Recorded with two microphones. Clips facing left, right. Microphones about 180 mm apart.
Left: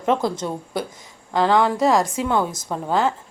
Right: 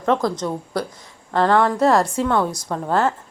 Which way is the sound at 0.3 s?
25° left (ahead or behind).